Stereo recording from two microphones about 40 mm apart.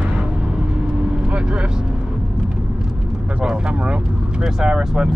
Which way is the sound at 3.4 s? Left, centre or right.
Centre.